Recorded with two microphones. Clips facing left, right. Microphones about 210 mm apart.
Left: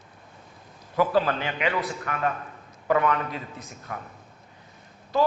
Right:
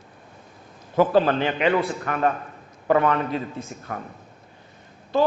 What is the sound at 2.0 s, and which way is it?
Speech, 40° right (ahead or behind).